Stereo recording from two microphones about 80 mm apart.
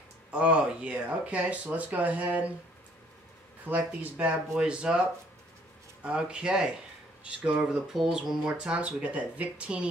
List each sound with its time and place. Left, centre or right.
0.3 s speech: centre
3.6 s speech: right
6.0 s speech: centre